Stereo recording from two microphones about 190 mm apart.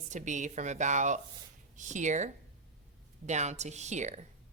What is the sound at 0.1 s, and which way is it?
A woman's voice, 40° right (ahead or behind).